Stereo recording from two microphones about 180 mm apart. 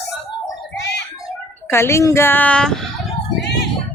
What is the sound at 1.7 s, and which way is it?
Speech, 15° left (ahead or behind).